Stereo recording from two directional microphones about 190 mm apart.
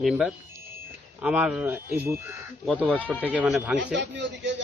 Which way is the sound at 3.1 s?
10° left (ahead or behind).